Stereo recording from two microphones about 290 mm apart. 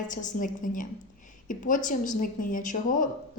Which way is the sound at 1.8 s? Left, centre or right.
Left.